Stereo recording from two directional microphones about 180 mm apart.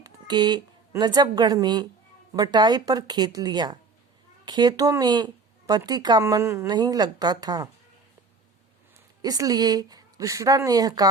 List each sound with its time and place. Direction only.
0.0 s speech: 25° right (ahead or behind)
9.2 s speech: 20° right (ahead or behind)